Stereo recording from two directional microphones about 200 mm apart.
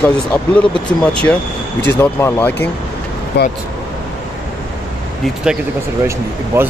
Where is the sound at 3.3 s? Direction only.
55° left (ahead or behind).